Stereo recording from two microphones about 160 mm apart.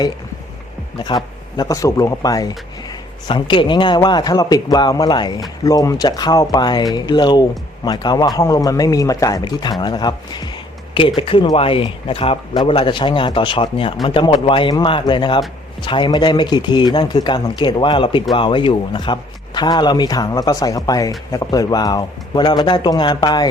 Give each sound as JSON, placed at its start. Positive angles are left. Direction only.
{"t": 0.9, "sound": "a man's voice", "side_deg": 25}